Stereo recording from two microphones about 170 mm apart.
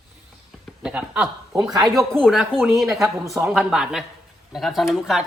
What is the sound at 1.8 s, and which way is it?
Speech, 20° right (ahead or behind).